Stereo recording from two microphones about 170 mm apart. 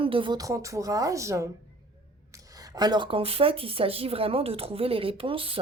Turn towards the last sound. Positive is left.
turn(degrees=-30)  # may be behind; listen again after turning